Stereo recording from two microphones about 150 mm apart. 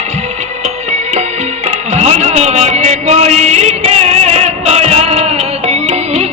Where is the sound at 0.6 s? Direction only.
45° right (ahead or behind).